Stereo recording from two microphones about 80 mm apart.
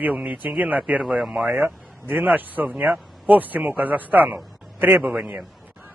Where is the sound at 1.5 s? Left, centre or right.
Right.